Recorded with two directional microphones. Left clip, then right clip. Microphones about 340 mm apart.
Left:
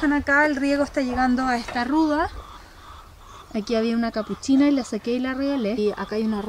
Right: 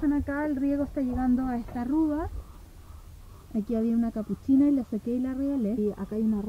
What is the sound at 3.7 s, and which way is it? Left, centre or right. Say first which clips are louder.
Speech: left 6 dB; centre.